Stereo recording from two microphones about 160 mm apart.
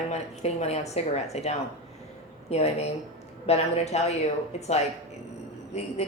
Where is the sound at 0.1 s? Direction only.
45° left (ahead or behind).